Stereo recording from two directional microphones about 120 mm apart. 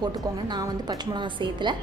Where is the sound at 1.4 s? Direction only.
40° right (ahead or behind).